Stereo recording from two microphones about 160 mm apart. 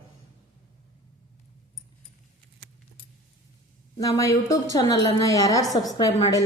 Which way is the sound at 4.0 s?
20° left (ahead or behind).